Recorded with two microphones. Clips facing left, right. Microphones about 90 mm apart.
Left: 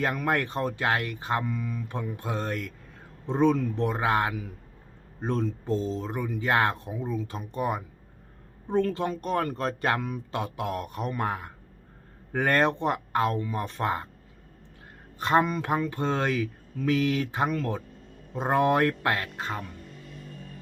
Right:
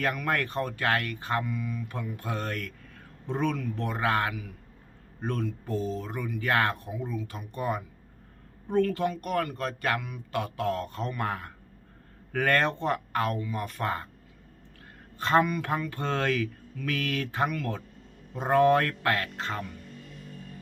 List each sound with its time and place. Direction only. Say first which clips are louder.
0.0 s speech: left 2 dB; 20° left (ahead or behind)
1.5 s speech: left 1 dB; 30° left (ahead or behind)
15.2 s speech: left 1 dB; 20° left (ahead or behind)